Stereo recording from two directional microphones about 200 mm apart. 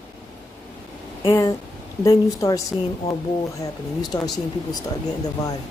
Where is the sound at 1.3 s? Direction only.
15° left (ahead or behind).